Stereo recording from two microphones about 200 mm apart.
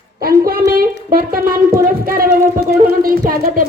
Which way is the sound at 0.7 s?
45° right (ahead or behind).